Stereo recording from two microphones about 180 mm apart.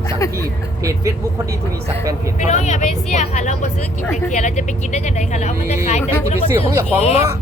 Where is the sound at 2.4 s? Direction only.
40° left (ahead or behind).